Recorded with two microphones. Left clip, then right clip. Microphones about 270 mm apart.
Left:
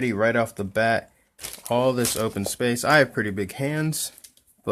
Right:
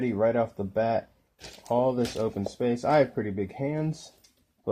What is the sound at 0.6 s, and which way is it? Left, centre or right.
Speech, left.